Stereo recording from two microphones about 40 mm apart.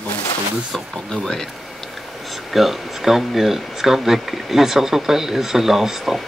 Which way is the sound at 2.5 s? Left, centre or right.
Centre.